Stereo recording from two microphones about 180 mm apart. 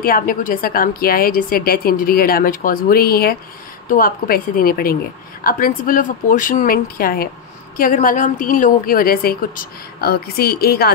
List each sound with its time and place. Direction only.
0.0 s a woman's voice: 50° left (ahead or behind)